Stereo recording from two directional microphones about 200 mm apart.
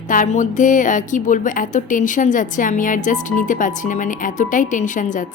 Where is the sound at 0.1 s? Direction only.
40° left (ahead or behind).